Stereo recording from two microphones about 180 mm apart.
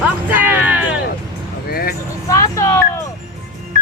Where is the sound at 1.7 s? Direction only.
60° left (ahead or behind).